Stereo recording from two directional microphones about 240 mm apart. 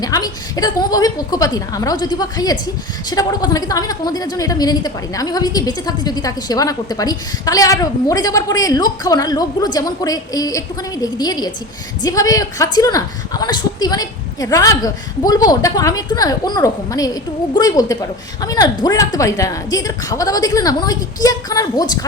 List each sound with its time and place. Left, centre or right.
0.0 s a woman's voice: centre